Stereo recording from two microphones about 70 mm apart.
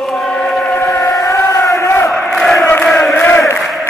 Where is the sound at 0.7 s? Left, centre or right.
Left.